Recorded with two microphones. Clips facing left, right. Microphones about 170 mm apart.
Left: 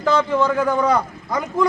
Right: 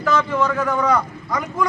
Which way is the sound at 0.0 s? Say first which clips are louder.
Left 2 dB; 30° left (ahead or behind).